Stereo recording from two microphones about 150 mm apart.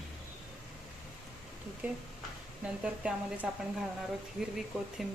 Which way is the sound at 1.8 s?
10° right (ahead or behind).